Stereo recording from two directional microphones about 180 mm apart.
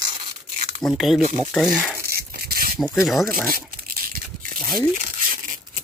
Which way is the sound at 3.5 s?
50° right (ahead or behind).